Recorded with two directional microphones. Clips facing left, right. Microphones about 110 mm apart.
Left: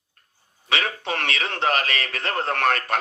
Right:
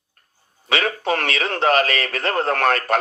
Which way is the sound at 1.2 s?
40° right (ahead or behind).